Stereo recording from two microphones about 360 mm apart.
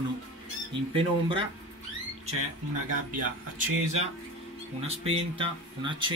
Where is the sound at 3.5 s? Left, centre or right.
Right.